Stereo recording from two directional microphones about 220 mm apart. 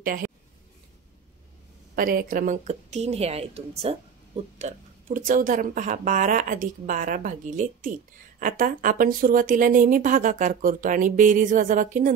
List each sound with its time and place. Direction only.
0.0 s speech: 40° right (ahead or behind)
2.0 s a woman's voice: 40° right (ahead or behind)